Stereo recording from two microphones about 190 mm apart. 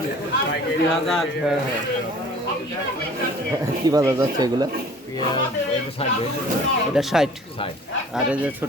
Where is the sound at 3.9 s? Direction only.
20° right (ahead or behind).